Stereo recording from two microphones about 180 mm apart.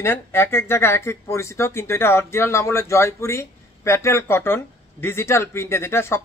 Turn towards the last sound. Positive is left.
turn(degrees=15)  # may be behind; listen again after turning